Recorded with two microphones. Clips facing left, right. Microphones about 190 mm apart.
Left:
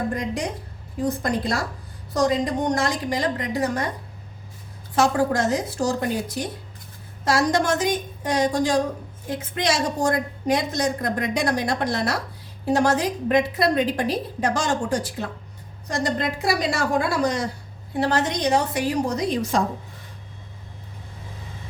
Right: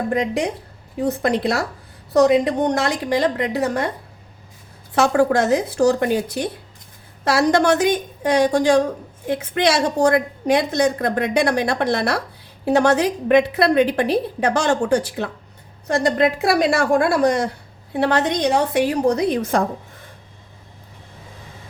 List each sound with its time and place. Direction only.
0.1 s a woman's voice: 70° right (ahead or behind)
4.9 s a woman's voice: 65° right (ahead or behind)